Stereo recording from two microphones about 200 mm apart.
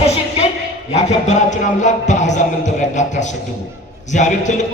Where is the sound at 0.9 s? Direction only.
35° left (ahead or behind).